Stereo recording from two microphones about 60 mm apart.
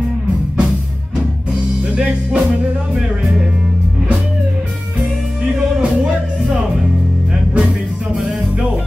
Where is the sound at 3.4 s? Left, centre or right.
Centre.